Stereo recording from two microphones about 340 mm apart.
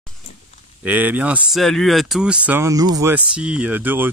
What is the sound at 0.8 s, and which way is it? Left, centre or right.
A man's voice, centre.